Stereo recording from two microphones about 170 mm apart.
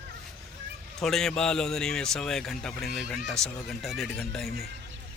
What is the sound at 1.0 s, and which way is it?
Speech, centre (ahead or behind).